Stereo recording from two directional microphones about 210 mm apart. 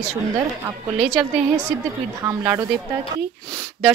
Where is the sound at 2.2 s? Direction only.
15° right (ahead or behind).